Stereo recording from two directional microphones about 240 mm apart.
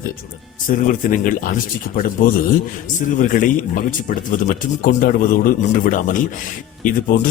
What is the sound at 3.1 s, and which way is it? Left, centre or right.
A man's voice, left.